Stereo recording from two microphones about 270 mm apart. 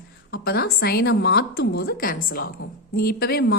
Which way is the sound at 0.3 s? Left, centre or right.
Left.